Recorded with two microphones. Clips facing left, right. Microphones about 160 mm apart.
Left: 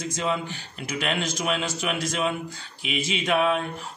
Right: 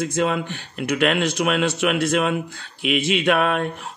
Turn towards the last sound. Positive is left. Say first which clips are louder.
# right 3 dB
turn(degrees=-65)  # may be behind; listen again after turning